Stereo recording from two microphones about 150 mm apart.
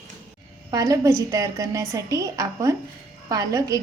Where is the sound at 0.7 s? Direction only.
20° right (ahead or behind).